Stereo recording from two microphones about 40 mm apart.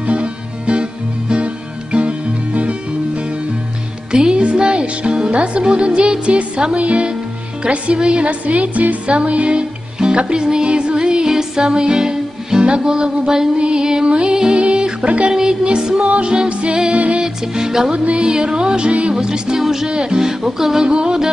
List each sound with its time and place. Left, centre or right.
0.0 s music: right
4.1 s music: right
6.2 s speech: right
14.3 s music: centre; by 15.3 s right
15.6 s speech: right
17.6 s music: centre
17.9 s speech: right
19.1 s music: centre
19.9 s music: centre
20.9 s speech: right